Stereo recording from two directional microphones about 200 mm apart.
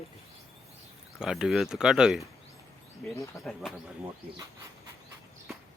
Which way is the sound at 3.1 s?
15° left (ahead or behind).